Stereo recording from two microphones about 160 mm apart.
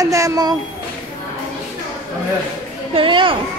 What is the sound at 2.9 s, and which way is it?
Children playing, 35° right (ahead or behind).